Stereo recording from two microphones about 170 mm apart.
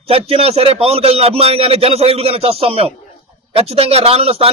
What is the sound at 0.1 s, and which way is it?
Speech, 35° right (ahead or behind).